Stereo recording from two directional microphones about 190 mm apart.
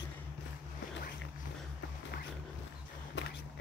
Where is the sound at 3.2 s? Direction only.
70° left (ahead or behind).